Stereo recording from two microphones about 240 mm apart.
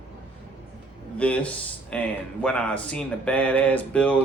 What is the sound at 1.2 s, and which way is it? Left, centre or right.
Speech, centre.